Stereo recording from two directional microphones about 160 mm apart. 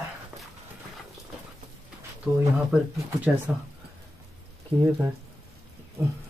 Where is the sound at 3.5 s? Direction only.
5° right (ahead or behind).